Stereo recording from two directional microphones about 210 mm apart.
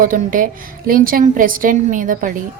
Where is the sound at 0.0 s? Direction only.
40° right (ahead or behind).